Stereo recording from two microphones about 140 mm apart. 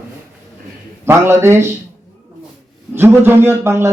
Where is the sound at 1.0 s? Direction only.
20° right (ahead or behind).